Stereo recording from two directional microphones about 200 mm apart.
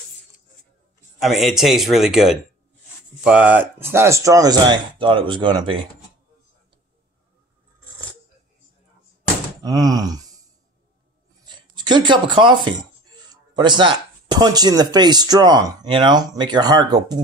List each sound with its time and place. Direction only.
1.2 s speech: centre (ahead or behind); by 5.8 s 20° right (ahead or behind)
9.6 s speech: 20° right (ahead or behind)
11.4 s speech: 20° right (ahead or behind)